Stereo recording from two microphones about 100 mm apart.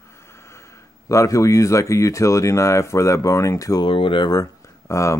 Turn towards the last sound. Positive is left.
turn(degrees=30)  # may be behind; listen again after turning